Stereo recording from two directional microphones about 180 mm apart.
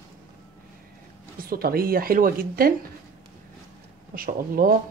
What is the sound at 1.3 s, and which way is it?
Speech, 55° right (ahead or behind).